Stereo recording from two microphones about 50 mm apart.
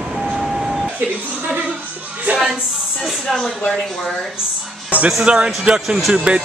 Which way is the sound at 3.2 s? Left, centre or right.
Centre.